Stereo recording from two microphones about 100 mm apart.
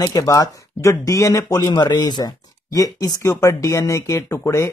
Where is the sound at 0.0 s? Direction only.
35° left (ahead or behind).